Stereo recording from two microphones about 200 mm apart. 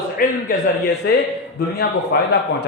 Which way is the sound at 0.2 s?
45° left (ahead or behind).